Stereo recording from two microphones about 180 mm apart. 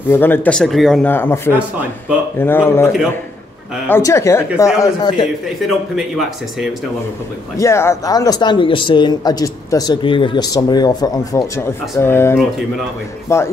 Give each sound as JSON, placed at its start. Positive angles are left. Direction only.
{"t": 0.1, "sound": "speech", "side_deg": 10}
{"t": 3.9, "sound": "speech", "side_deg": 15}
{"t": 5.6, "sound": "speech", "side_deg": 0}
{"t": 7.5, "sound": "speech", "side_deg": 15}